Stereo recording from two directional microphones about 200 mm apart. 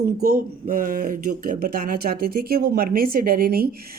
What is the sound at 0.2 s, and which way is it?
Speech, 45° right (ahead or behind).